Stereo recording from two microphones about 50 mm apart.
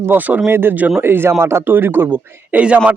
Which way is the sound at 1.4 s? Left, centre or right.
Right.